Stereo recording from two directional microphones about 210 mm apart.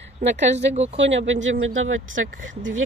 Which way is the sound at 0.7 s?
30° right (ahead or behind).